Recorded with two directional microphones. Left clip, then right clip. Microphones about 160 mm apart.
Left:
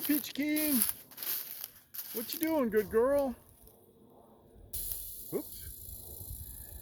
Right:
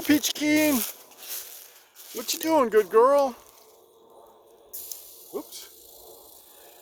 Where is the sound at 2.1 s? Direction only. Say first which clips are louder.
Right 10 dB; 55° right (ahead or behind); by 3.4 s 25° right (ahead or behind).